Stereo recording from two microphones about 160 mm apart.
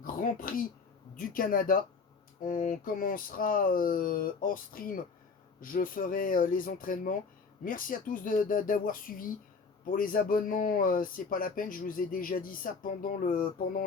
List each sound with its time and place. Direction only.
0.0 s speech: 60° left (ahead or behind)